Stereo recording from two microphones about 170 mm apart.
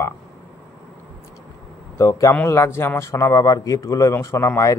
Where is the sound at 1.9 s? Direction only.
15° left (ahead or behind).